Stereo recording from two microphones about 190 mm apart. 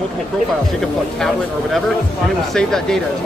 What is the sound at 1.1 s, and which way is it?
Speech, centre (ahead or behind).